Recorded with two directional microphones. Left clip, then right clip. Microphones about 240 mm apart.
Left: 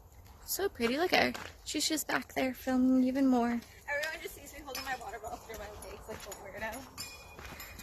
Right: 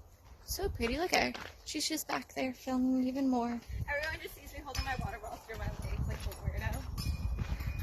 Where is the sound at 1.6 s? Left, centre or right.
Centre.